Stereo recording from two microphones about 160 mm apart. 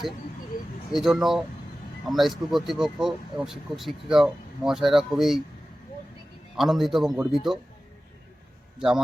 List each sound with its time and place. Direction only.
0.5 s a sound: 60° left (ahead or behind)
0.9 s speech: centre (ahead or behind)
6.6 s speech: centre (ahead or behind)